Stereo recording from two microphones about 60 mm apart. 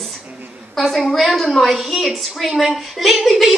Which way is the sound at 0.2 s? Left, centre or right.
Right.